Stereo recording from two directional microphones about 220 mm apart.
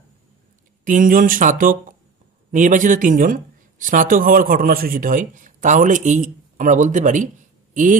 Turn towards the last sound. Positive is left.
turn(degrees=-35)  # may be behind; listen again after turning